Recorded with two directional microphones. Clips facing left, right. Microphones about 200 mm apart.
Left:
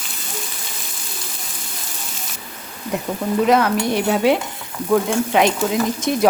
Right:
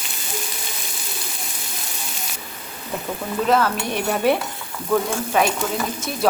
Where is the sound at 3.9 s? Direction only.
15° left (ahead or behind).